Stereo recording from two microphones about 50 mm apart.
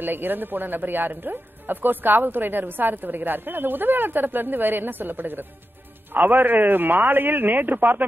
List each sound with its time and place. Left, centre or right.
0.0 s speech: right